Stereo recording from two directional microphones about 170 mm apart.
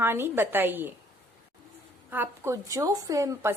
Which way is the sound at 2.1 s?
15° right (ahead or behind).